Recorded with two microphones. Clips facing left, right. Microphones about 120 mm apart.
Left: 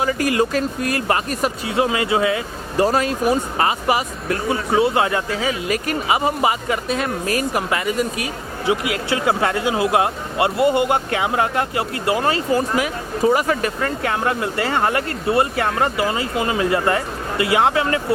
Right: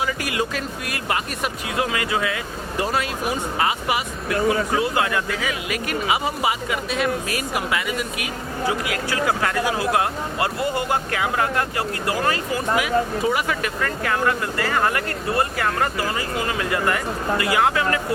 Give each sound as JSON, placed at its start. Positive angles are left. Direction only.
{"t": 0.0, "sound": "speech", "side_deg": 40}
{"t": 1.7, "sound": "speech", "side_deg": 25}
{"t": 8.6, "sound": "speech", "side_deg": 20}